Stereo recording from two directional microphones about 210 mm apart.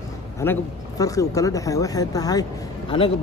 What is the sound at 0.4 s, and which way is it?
Speech, 15° left (ahead or behind).